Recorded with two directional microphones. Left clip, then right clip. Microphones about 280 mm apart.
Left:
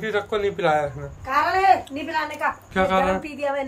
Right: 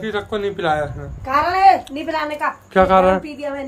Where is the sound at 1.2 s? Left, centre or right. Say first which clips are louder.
Right 4 dB; right.